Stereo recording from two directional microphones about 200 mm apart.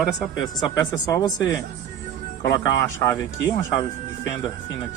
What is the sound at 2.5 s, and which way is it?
Speech, 15° left (ahead or behind).